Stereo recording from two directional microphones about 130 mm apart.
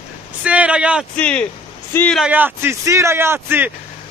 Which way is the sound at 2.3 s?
15° right (ahead or behind).